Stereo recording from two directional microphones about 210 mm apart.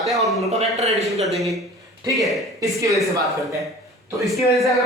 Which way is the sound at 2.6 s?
15° right (ahead or behind).